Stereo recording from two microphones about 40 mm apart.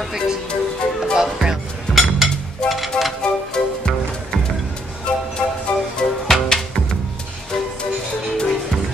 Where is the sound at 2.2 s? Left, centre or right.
Centre.